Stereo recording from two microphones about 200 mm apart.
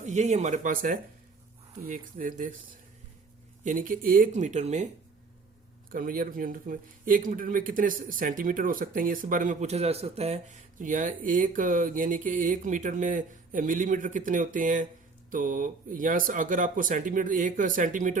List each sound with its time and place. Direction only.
0.0 s speech: 35° right (ahead or behind)
3.6 s speech: 40° right (ahead or behind)
5.9 s speech: 45° right (ahead or behind)